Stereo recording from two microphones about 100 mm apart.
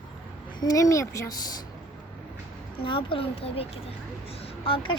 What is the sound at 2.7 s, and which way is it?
Speech, 60° left (ahead or behind).